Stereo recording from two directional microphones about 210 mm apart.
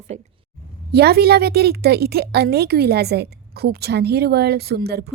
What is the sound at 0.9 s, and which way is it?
A woman's voice, 50° right (ahead or behind).